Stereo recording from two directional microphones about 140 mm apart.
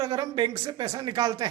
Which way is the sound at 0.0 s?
30° right (ahead or behind).